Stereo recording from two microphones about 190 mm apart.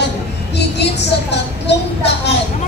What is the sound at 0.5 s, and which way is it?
A woman's voice, 65° left (ahead or behind).